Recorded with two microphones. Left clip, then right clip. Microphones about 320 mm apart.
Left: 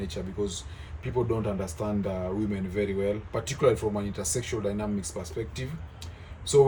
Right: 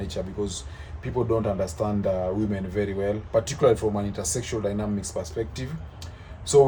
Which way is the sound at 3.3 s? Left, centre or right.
Centre.